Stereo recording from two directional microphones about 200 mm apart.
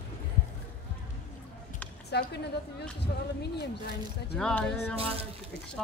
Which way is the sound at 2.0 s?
55° left (ahead or behind).